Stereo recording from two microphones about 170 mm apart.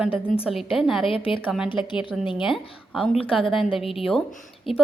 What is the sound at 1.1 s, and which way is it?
Speech, 30° left (ahead or behind).